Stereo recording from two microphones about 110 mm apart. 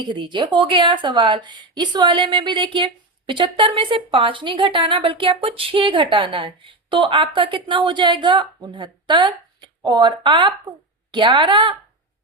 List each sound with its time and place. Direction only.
0.0 s a woman's voice: 45° right (ahead or behind)